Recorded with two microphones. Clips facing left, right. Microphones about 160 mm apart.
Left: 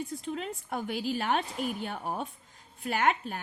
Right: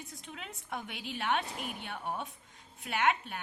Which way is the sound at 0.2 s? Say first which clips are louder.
Left 11 dB; 40° left (ahead or behind).